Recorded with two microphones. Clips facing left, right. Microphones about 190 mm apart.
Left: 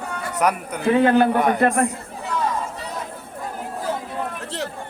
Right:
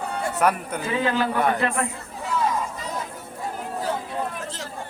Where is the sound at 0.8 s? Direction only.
55° left (ahead or behind).